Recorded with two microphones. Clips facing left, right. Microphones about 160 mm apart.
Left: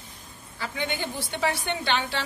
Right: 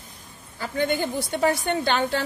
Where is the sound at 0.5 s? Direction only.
45° right (ahead or behind).